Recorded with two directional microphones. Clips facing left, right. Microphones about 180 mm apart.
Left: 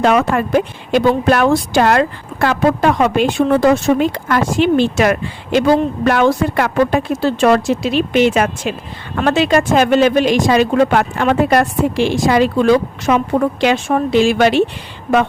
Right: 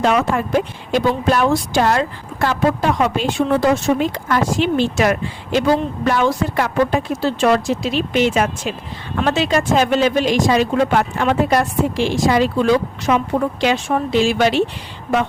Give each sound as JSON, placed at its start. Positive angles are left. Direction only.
{"t": 0.0, "sound": "speech", "side_deg": 60}